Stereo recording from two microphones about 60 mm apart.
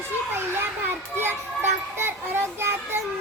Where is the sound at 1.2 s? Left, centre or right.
Right.